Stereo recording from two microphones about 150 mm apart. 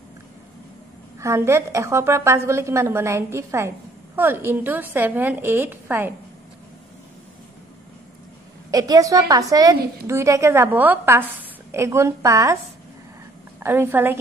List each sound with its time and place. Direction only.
1.2 s a woman's voice: 20° right (ahead or behind)
8.6 s a woman's voice: 25° right (ahead or behind)
13.6 s a woman's voice: 15° right (ahead or behind)